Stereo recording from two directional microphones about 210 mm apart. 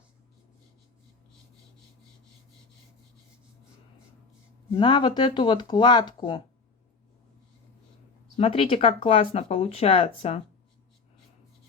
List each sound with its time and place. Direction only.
4.7 s speech: 20° left (ahead or behind)
8.4 s speech: 25° left (ahead or behind)